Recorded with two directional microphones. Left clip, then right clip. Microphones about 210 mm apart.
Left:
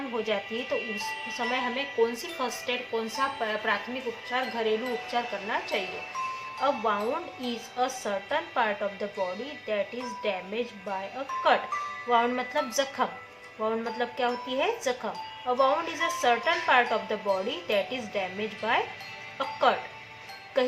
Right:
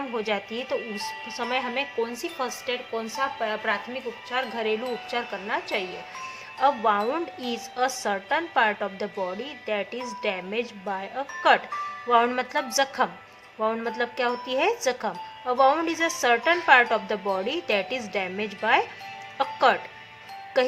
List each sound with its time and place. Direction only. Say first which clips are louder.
0.3 s speech: right 1 dB; 50° right (ahead or behind)
10.2 s speech: right 3 dB; 50° right (ahead or behind)
12.0 s speech: right 4 dB; 50° right (ahead or behind)